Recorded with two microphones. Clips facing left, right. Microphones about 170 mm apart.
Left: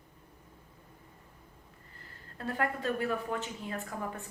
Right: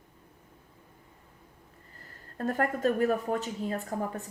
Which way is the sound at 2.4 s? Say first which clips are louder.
Right 6 dB; 45° right (ahead or behind).